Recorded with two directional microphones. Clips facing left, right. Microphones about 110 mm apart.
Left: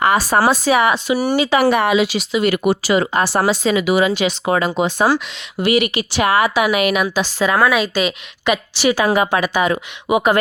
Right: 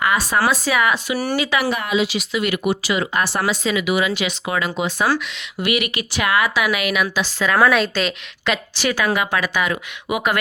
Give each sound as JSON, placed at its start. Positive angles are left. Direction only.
{"t": 0.3, "sound": "speech", "side_deg": 30}
{"t": 1.6, "sound": "speech", "side_deg": 70}
{"t": 2.1, "sound": "speech", "side_deg": 30}
{"t": 7.6, "sound": "a woman's voice", "side_deg": 5}
{"t": 9.0, "sound": "speech", "side_deg": 35}